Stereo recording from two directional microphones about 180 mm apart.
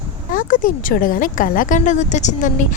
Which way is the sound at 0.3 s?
45° left (ahead or behind).